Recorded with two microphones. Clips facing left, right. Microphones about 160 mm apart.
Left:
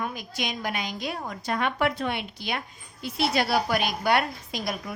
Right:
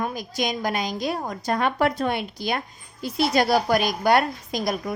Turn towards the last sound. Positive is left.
turn(degrees=-40)  # may be behind; listen again after turning